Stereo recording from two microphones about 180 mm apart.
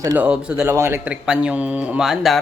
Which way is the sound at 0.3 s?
5° right (ahead or behind).